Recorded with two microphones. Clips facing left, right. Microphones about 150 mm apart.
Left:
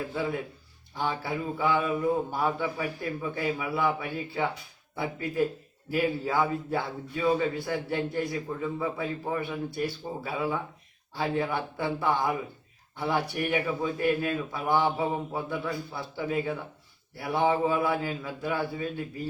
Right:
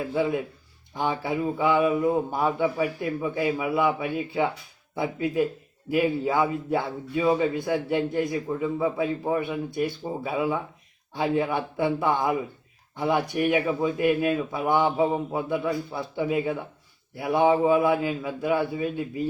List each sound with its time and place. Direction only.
0.1 s a man's voice: 20° right (ahead or behind)